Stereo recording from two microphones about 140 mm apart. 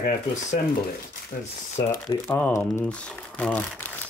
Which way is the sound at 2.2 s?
15° left (ahead or behind).